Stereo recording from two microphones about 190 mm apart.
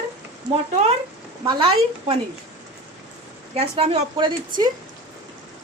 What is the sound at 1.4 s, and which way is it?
Speech, 30° right (ahead or behind).